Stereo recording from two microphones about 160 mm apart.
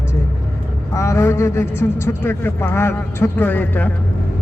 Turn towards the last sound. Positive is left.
turn(degrees=10)  # may be behind; listen again after turning